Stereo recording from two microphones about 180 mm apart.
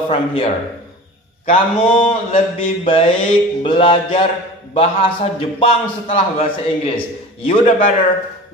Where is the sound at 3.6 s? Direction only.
30° left (ahead or behind).